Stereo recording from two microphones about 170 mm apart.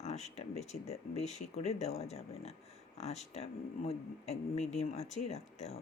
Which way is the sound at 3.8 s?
40° left (ahead or behind).